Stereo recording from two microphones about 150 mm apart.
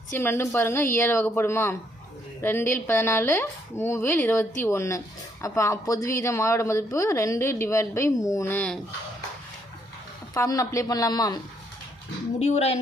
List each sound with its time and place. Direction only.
0.2 s a woman's voice: 15° left (ahead or behind)
10.3 s speech: 20° left (ahead or behind)
12.4 s a woman's voice: 45° left (ahead or behind)